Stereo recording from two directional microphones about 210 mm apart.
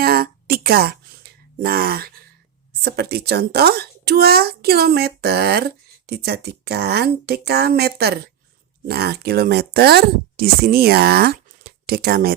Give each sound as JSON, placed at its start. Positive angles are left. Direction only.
{"t": 0.0, "sound": "music", "side_deg": -45}
{"t": 2.8, "sound": "speech", "side_deg": -50}